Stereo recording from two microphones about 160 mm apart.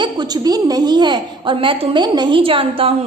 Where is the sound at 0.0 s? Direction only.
25° right (ahead or behind).